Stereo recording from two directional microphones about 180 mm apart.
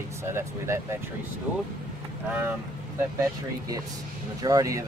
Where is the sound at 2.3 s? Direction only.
10° right (ahead or behind).